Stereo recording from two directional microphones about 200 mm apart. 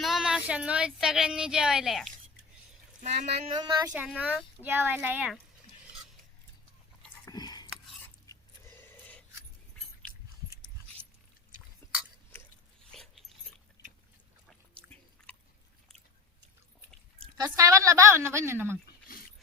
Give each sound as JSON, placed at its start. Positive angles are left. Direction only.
{"t": 0.0, "sound": "speech", "side_deg": 0}
{"t": 3.0, "sound": "speech", "side_deg": -35}
{"t": 3.5, "sound": "speech", "side_deg": -20}
{"t": 4.2, "sound": "a woman's voice", "side_deg": -5}
{"t": 7.3, "sound": "a sound", "side_deg": 20}
{"t": 12.9, "sound": "dog", "side_deg": 0}
{"t": 17.3, "sound": "a woman's voice", "side_deg": -15}